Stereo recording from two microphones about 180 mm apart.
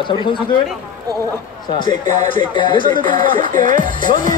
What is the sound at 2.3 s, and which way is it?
Speech, 25° left (ahead or behind).